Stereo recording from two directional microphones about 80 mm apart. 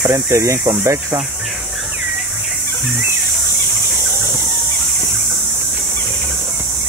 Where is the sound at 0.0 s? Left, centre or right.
Right.